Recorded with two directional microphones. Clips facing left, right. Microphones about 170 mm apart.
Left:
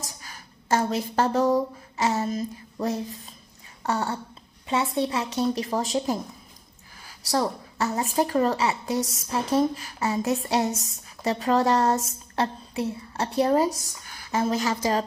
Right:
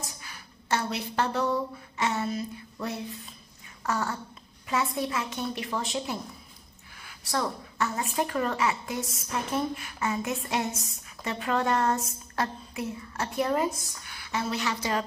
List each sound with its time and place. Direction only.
0.0 s a woman's voice: 40° left (ahead or behind)